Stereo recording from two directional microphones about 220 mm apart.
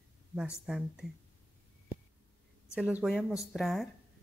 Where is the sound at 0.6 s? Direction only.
Centre (ahead or behind).